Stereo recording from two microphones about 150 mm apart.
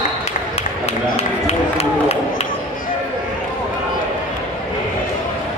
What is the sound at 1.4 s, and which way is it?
Run, 40° left (ahead or behind).